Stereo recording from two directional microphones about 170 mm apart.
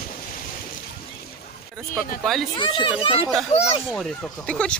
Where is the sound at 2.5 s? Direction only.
30° left (ahead or behind).